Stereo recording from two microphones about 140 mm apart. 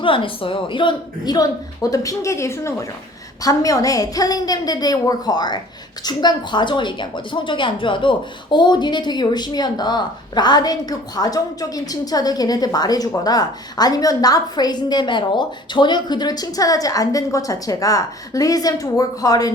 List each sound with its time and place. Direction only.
0.0 s a woman's voice: 40° left (ahead or behind)